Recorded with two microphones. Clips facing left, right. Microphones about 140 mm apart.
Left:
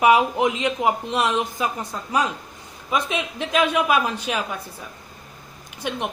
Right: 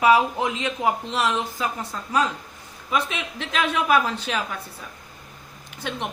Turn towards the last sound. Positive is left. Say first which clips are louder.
# left 3 dB
turn(degrees=15)  # may be behind; listen again after turning